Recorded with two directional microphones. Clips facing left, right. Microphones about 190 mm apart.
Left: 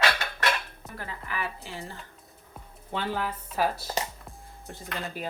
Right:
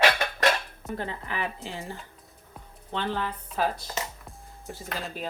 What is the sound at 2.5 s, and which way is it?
Speech, 10° left (ahead or behind).